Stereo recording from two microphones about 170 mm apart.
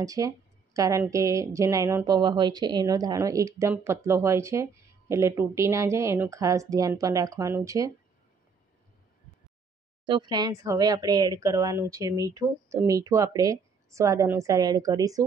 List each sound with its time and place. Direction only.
0.0 s speech: 20° right (ahead or behind)
10.0 s speech: 25° right (ahead or behind)